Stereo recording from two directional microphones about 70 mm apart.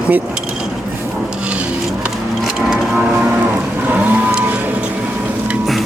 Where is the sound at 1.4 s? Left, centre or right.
Centre.